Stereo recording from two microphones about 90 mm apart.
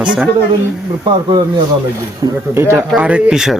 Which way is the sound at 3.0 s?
15° right (ahead or behind).